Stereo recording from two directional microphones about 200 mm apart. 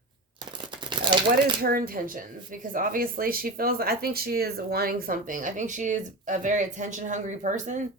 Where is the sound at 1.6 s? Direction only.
45° right (ahead or behind).